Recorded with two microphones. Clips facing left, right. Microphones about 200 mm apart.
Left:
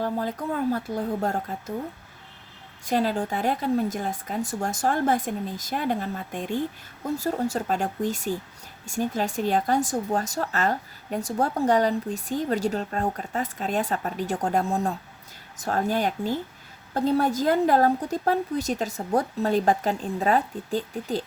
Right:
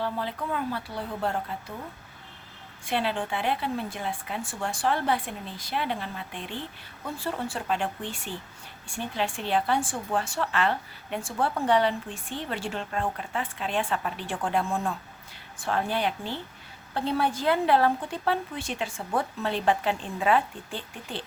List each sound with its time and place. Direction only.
0.0 s speech: 45° left (ahead or behind)
2.8 s speech: 40° left (ahead or behind)